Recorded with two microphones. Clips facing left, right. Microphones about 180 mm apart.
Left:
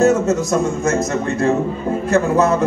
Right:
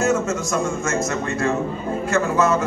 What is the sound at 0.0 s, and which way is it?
Speech, 35° left (ahead or behind).